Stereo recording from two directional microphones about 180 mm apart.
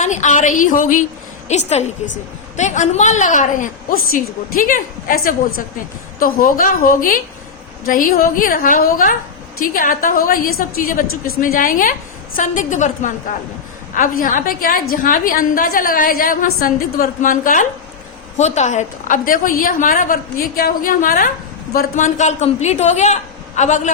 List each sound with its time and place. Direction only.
0.0 s a woman's voice: 40° left (ahead or behind)